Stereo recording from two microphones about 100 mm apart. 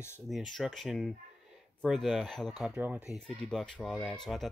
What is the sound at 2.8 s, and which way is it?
Speech, 15° right (ahead or behind).